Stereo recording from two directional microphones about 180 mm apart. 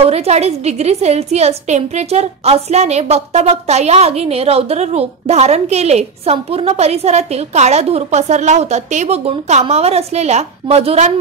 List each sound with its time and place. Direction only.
0.0 s a woman's voice: 35° right (ahead or behind)